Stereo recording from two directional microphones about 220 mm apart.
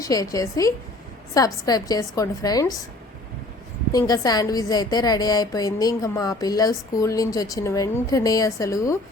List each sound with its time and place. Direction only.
0.0 s a woman's voice: 15° left (ahead or behind)
3.9 s a woman's voice: 15° left (ahead or behind)